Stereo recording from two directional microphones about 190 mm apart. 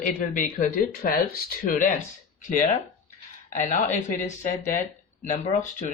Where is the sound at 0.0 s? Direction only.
45° left (ahead or behind).